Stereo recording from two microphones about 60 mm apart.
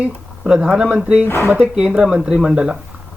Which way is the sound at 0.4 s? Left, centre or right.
Centre.